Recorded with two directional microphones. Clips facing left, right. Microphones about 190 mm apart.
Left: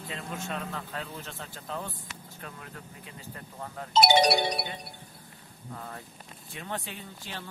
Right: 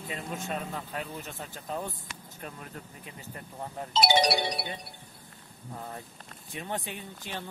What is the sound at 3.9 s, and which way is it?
Music, 55° left (ahead or behind).